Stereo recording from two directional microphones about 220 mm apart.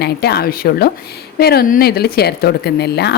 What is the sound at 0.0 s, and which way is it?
A woman's voice, 45° left (ahead or behind).